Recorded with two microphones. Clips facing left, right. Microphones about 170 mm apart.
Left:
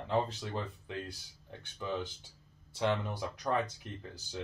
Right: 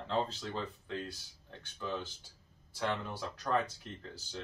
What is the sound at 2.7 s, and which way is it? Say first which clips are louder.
Speech: left 4 dB; 20° left (ahead or behind).